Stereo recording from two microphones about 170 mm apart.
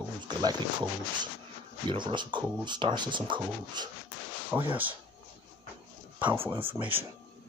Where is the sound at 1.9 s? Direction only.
25° right (ahead or behind).